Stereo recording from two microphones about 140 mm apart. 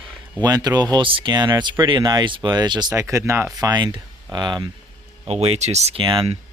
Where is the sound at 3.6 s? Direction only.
30° right (ahead or behind).